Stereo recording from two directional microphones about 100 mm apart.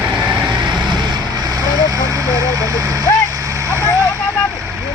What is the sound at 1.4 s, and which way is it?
Vehicle, 35° right (ahead or behind).